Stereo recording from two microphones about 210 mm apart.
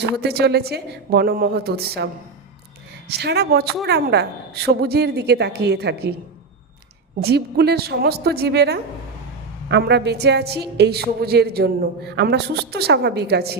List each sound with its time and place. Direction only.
0.0 s a man's voice: 50° right (ahead or behind)
3.1 s a man's voice: 50° right (ahead or behind)
7.2 s a man's voice: 50° right (ahead or behind)